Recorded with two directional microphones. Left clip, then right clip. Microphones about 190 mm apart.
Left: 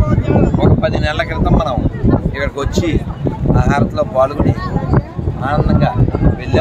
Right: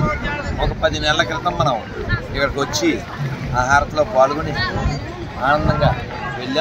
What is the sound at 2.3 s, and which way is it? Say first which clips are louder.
Speech: even; 25° left (ahead or behind).